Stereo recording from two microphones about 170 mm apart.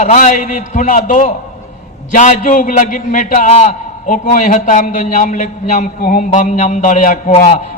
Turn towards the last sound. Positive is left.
turn(degrees=40)  # may be behind; listen again after turning